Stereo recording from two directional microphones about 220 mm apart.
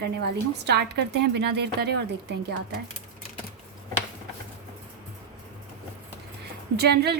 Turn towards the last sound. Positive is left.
turn(degrees=-45)  # may be behind; listen again after turning